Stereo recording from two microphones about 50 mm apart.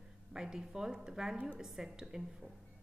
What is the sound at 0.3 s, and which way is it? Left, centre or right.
A woman's voice, centre.